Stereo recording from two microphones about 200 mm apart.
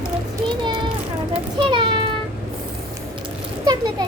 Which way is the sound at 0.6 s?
25° right (ahead or behind).